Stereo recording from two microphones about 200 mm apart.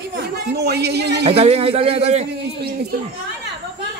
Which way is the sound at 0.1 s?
55° right (ahead or behind).